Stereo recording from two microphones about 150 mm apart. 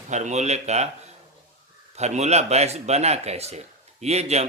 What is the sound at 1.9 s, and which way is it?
Speech, 45° right (ahead or behind).